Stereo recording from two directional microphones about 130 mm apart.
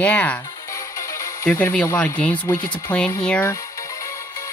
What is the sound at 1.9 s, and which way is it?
Speech, 10° left (ahead or behind).